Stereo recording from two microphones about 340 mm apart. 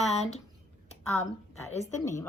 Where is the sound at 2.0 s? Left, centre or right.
Centre.